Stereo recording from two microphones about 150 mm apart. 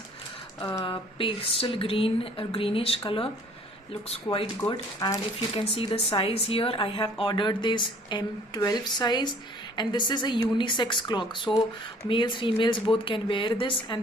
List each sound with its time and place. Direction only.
0.6 s a woman's voice: 25° left (ahead or behind)
4.6 s speech: 25° left (ahead or behind)
5.7 s a woman's voice: 35° left (ahead or behind)